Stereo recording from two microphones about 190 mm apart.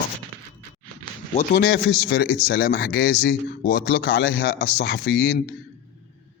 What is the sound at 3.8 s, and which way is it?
A man's voice, 70° left (ahead or behind).